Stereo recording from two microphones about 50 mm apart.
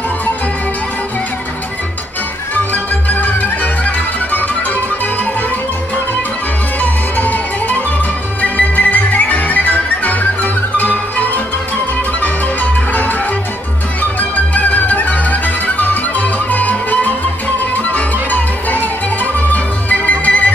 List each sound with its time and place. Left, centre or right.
2.5 s music: left
6.8 s music: left
14.3 s music: left